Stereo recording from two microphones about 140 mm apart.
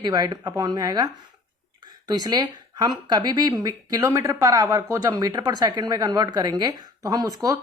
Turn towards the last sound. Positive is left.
turn(degrees=-25)  # may be behind; listen again after turning